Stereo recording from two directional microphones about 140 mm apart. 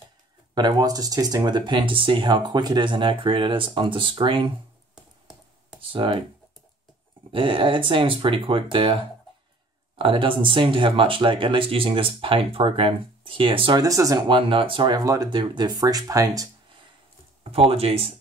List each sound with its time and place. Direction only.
0.6 s speech: 30° right (ahead or behind)
4.9 s a sound: 5° right (ahead or behind)
5.8 s speech: 40° right (ahead or behind)
7.3 s speech: 40° right (ahead or behind)
13.8 s speech: 25° right (ahead or behind)
14.3 s speech: 40° right (ahead or behind)
17.4 s speech: 45° right (ahead or behind)